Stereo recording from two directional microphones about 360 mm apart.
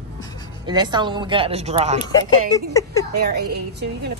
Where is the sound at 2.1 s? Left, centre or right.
Centre.